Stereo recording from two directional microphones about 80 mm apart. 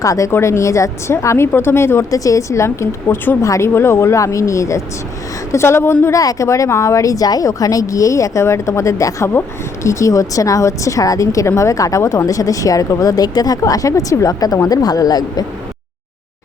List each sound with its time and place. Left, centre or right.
0.0 s a woman's voice: left
0.3 s a woman's voice: left
6.1 s a woman's voice: left